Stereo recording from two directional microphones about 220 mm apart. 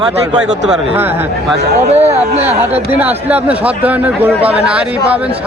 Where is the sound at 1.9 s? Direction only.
30° right (ahead or behind).